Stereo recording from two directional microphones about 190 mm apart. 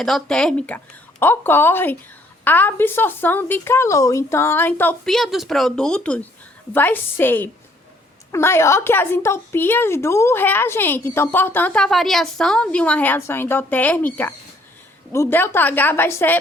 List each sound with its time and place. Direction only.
0.0 s a woman's voice: 5° left (ahead or behind)